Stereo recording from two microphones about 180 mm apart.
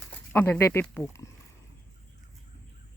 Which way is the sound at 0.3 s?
10° left (ahead or behind).